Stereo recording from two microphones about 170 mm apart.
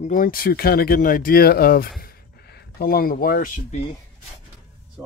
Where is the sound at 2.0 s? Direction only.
70° left (ahead or behind); by 3.8 s 50° left (ahead or behind).